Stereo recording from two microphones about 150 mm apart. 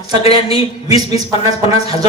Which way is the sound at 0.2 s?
40° left (ahead or behind).